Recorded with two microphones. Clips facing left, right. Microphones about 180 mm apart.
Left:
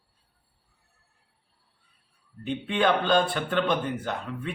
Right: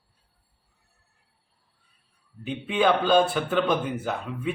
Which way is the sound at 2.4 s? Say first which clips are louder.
Right 2 dB; 5° right (ahead or behind).